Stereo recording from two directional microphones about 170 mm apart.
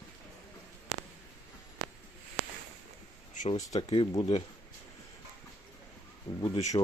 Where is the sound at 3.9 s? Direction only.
30° left (ahead or behind).